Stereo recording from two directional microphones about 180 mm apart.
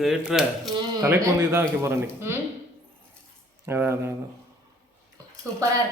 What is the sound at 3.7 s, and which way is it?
Speech, 10° right (ahead or behind).